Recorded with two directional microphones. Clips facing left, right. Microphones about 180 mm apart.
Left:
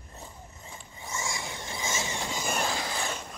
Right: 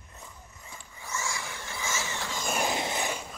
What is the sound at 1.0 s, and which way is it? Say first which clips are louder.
Vehicle: even; 15° left (ahead or behind).